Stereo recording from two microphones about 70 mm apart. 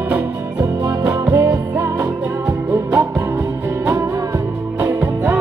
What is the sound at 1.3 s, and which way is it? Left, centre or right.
Music, right.